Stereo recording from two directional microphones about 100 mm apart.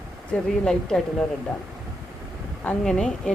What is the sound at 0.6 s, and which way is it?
Speech, 5° left (ahead or behind).